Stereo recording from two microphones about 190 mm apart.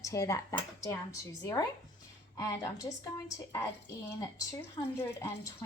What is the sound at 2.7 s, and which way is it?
Speech, 20° left (ahead or behind).